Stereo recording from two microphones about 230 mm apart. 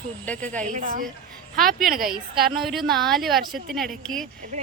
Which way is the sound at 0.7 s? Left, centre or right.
Right.